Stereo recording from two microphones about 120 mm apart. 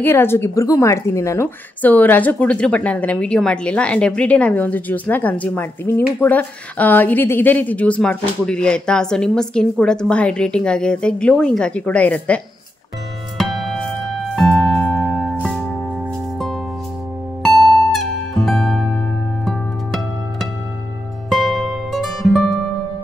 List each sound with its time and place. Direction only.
0.0 s speech: 20° left (ahead or behind)
1.8 s speech: 15° left (ahead or behind)
13.4 s music: centre (ahead or behind)
17.4 s music: centre (ahead or behind)